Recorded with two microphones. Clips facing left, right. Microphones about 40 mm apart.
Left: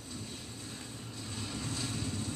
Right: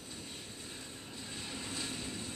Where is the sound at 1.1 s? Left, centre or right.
Centre.